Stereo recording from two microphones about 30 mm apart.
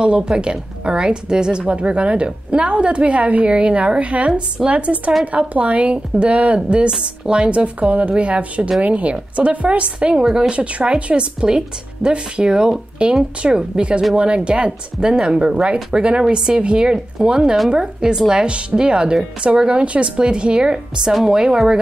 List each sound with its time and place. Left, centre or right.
0.0 s a woman's voice: right
3.4 s a woman's voice: right
10.5 s a woman's voice: right
11.4 s speech: right
19.8 s a woman's voice: right
20.2 s speech: right